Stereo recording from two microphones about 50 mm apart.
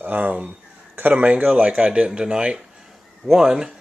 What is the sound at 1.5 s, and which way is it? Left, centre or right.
Speech, centre.